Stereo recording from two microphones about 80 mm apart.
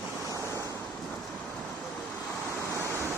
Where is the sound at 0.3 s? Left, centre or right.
Right.